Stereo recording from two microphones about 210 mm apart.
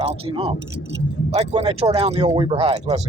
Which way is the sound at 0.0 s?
25° right (ahead or behind).